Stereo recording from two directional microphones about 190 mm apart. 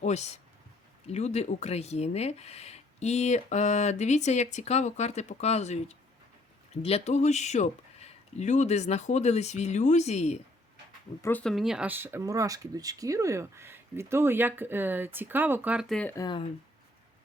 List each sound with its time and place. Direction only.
0.0 s speech: 35° left (ahead or behind)
6.8 s speech: 35° left (ahead or behind)
11.2 s speech: 10° left (ahead or behind)
16.1 s speech: 20° left (ahead or behind)